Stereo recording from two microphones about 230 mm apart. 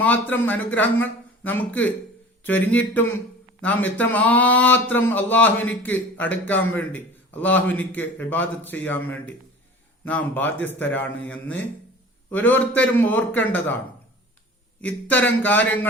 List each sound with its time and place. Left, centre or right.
0.0 s a man's voice: centre
14.8 s a man's voice: centre